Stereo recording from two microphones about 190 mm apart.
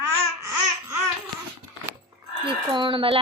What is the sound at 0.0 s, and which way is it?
Babbling, 15° right (ahead or behind).